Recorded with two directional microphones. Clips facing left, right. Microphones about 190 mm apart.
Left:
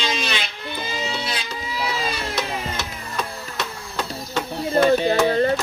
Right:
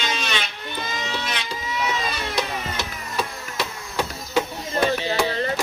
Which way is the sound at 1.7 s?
30° left (ahead or behind).